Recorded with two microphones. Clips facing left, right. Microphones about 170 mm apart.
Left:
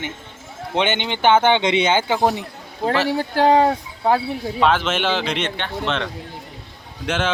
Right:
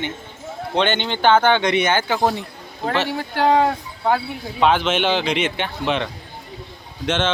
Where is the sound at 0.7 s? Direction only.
15° left (ahead or behind).